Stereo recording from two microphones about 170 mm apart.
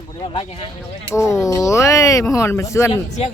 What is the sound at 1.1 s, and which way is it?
Speech, 15° left (ahead or behind).